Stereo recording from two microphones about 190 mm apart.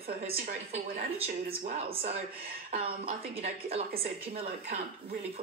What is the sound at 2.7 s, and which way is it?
Speech, 35° right (ahead or behind).